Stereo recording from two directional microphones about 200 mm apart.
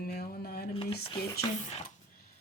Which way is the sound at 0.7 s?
30° left (ahead or behind).